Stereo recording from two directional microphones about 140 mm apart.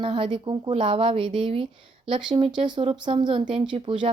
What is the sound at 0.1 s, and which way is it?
Speech, 35° right (ahead or behind).